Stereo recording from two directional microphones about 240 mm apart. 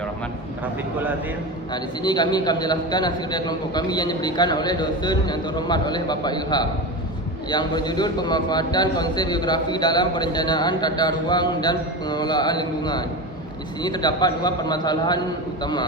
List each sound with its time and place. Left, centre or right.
1.7 s a man's voice: centre